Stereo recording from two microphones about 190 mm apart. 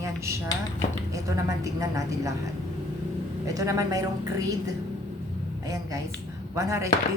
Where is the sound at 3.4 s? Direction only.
15° right (ahead or behind).